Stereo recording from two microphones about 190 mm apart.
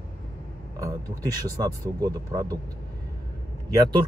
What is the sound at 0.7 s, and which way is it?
Speech, 15° right (ahead or behind).